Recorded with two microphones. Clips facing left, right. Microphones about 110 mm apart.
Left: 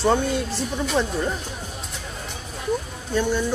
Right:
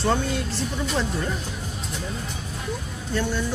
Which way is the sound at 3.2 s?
20° left (ahead or behind).